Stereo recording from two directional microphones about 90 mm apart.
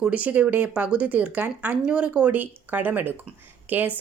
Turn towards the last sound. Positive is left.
turn(degrees=-20)  # may be behind; listen again after turning